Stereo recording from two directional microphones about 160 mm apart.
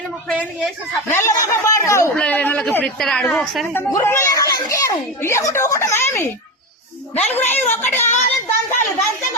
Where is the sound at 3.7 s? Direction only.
15° left (ahead or behind).